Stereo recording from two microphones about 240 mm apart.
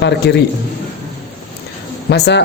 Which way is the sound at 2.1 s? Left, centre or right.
Left.